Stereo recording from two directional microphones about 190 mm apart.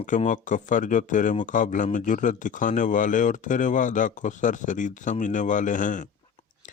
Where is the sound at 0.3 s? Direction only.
40° left (ahead or behind).